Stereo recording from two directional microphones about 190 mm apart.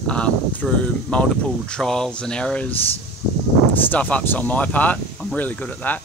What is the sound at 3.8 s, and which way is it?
Speech, 10° left (ahead or behind).